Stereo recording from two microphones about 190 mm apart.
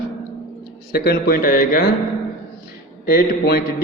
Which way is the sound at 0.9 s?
55° left (ahead or behind).